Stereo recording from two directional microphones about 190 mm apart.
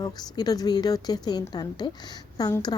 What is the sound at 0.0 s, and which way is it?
A woman's voice, 20° left (ahead or behind).